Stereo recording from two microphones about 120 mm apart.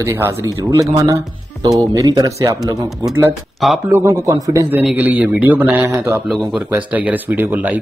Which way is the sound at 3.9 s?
25° right (ahead or behind).